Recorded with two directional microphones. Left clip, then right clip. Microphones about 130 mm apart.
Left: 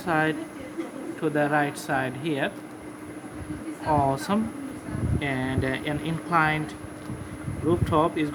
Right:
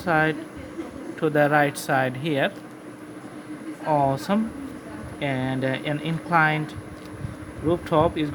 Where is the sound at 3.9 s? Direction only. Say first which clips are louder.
Right 2 dB; 40° right (ahead or behind).